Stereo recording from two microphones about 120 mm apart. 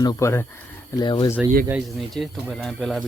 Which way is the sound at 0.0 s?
35° left (ahead or behind).